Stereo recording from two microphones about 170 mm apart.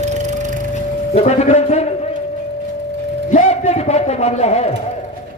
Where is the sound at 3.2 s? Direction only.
45° left (ahead or behind).